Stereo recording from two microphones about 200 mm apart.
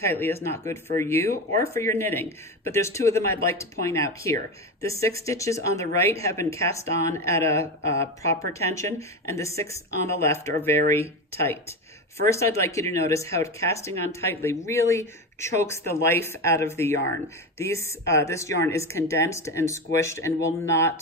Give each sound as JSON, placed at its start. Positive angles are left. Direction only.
{"t": 0.0, "sound": "speech", "side_deg": 10}